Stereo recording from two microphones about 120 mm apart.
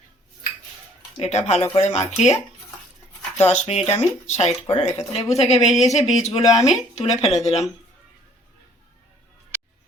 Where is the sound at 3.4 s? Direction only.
65° left (ahead or behind).